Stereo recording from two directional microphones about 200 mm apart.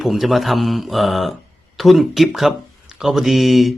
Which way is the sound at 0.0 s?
Centre (ahead or behind).